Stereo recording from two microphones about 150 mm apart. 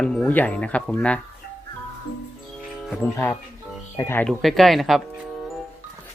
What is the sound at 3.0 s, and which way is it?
Speech, 15° left (ahead or behind).